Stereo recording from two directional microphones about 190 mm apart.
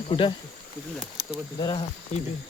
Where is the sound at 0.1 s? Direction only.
25° left (ahead or behind).